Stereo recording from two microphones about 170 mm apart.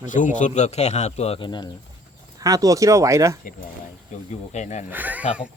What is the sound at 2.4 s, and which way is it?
Speech, 20° right (ahead or behind).